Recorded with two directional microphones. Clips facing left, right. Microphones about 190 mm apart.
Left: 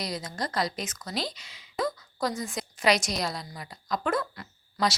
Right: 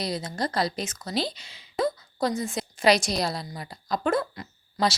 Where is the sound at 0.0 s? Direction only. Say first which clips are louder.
Right 4 dB; 30° right (ahead or behind).